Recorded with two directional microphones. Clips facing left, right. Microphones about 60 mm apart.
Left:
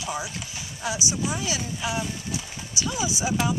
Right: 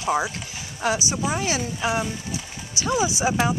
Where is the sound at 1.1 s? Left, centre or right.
Right.